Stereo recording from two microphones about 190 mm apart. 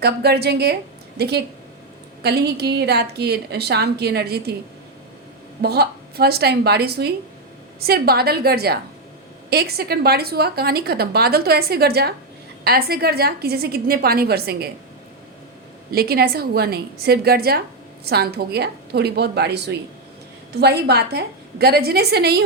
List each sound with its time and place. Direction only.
0.0 s a woman's voice: 60° right (ahead or behind)
5.6 s a woman's voice: 55° right (ahead or behind)
15.9 s a woman's voice: 55° right (ahead or behind)